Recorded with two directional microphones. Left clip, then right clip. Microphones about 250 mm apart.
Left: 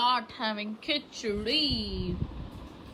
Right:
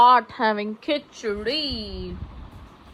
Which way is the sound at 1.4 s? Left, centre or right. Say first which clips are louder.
Left 1 dB; centre.